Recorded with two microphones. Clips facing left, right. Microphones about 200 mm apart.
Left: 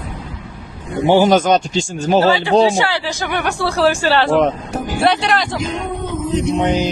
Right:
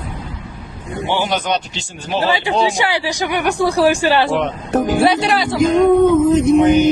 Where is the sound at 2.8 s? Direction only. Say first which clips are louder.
Right 1 dB; 15° right (ahead or behind).